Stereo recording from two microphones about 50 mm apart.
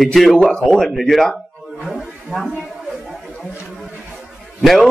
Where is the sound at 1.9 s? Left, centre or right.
Centre.